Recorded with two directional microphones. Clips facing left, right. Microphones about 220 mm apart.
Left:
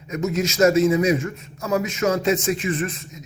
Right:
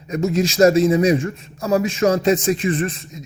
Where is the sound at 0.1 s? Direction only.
35° right (ahead or behind).